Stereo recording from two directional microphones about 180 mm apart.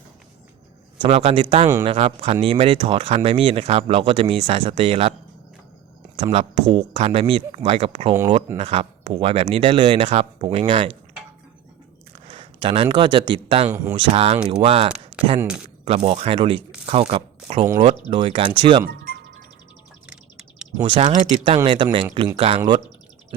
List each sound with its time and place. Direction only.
1.0 s speech: 35° right (ahead or behind)
6.1 s speech: 30° right (ahead or behind)
12.3 s speech: 30° right (ahead or behind)
13.7 s speech: 15° right (ahead or behind)
14.1 s speech: 35° right (ahead or behind)
14.3 s speech: 5° right (ahead or behind)
14.6 s speech: 30° right (ahead or behind)
15.4 s speech: 5° right (ahead or behind)
15.8 s speech: 30° right (ahead or behind)
20.1 s bird: 5° right (ahead or behind)
20.7 s speech: 25° right (ahead or behind)
21.0 s speech: 40° right (ahead or behind)